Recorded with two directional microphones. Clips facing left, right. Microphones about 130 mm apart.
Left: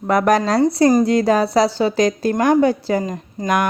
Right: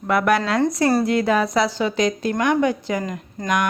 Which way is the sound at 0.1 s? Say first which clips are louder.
Left 3 dB; 40° left (ahead or behind).